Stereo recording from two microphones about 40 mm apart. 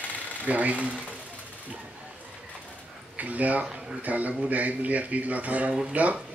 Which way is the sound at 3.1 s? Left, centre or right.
Right.